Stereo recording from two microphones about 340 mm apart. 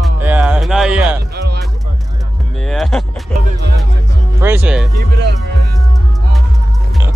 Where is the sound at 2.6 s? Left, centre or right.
Centre.